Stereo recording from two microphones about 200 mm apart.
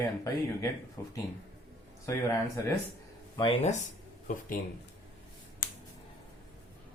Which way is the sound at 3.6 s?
35° left (ahead or behind).